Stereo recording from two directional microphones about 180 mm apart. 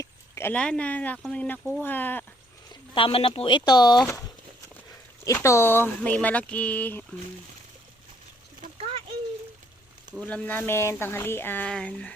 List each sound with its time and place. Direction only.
0.0 s speech: 15° left (ahead or behind)
2.9 s speech: 30° left (ahead or behind)
5.2 s speech: 15° left (ahead or behind)
10.2 s speech: 10° left (ahead or behind)